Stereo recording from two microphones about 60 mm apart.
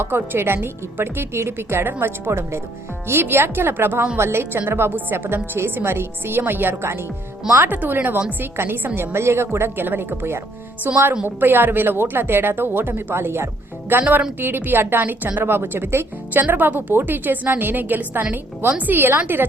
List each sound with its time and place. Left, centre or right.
0.0 s a woman's voice: right
4.9 s a woman's voice: right
13.9 s a woman's voice: right